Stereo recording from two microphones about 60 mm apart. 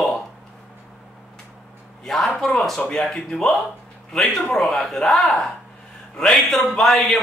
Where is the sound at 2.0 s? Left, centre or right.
Centre.